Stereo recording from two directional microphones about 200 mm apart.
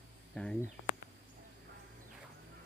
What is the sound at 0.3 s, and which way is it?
Speech, 5° left (ahead or behind).